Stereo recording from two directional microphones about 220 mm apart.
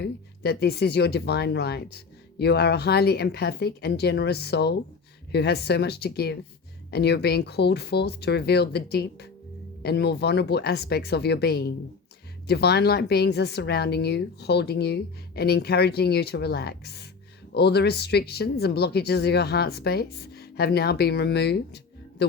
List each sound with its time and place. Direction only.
0.0 s a woman's voice: 45° left (ahead or behind)